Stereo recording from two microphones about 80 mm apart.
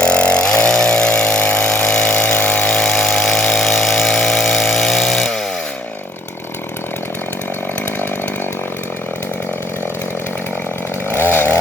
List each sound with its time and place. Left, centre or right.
0.0 s vehicle: centre
2.6 s power tool: centre
11.1 s chainsaw: left